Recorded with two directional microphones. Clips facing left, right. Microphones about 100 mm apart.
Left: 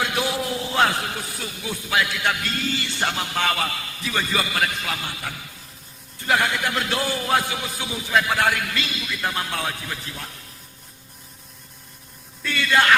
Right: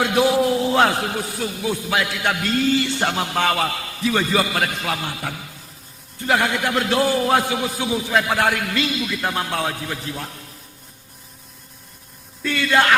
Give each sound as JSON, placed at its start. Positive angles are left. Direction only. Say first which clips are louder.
{"t": 0.0, "sound": "a man's voice", "louder": "right 8 dB", "side_deg": -45}
{"t": 12.5, "sound": "a man's voice", "louder": "right 1 dB", "side_deg": -45}